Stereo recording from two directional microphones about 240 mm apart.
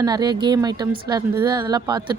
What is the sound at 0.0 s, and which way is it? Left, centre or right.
Speech, centre.